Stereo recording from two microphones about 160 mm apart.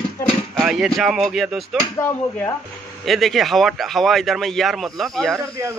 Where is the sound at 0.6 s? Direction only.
Centre (ahead or behind).